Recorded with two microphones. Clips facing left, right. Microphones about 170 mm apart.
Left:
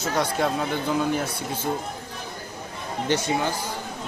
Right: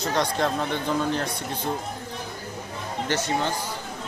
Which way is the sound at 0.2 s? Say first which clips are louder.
Left 1 dB; 5° left (ahead or behind).